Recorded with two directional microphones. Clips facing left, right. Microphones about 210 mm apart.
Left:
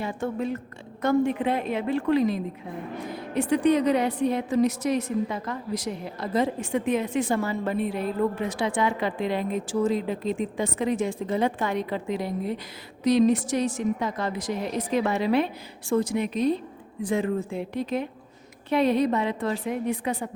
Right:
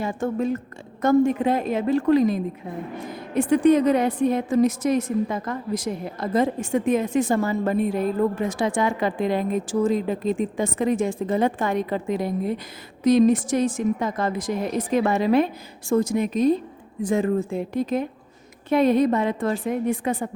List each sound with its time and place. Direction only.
0.0 s a woman's voice: 45° right (ahead or behind)